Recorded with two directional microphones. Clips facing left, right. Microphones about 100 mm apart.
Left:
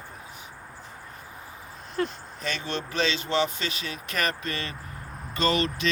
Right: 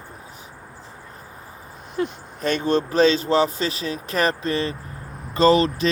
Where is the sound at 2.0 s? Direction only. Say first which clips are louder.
Right 3 dB; 15° right (ahead or behind).